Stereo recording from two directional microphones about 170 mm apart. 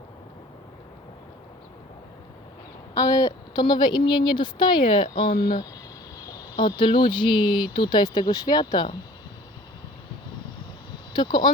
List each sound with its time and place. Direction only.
2.9 s a woman's voice: 20° left (ahead or behind)
6.6 s a woman's voice: 30° left (ahead or behind)
11.1 s speech: 25° left (ahead or behind)